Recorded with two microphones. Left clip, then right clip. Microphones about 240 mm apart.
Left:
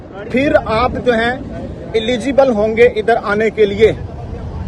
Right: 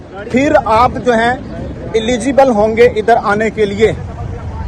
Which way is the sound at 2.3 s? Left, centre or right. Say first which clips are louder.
Right 3 dB; right.